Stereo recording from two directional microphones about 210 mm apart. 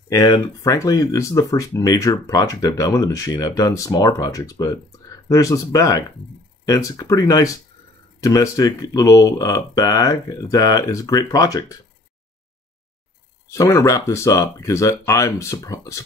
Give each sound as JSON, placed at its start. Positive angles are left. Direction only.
{"t": 0.1, "sound": "speech", "side_deg": 20}
{"t": 13.5, "sound": "speech", "side_deg": 15}